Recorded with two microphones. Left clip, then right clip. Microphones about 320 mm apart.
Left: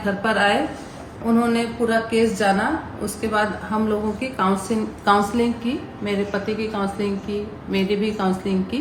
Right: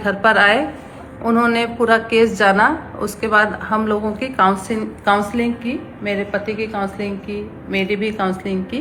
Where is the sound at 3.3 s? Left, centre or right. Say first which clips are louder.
Right 7 dB; centre.